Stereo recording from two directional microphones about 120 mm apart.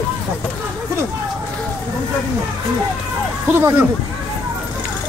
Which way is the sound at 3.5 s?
20° right (ahead or behind).